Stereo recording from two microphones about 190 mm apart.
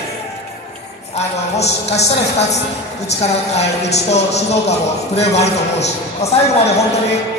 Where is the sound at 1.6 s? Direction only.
35° left (ahead or behind).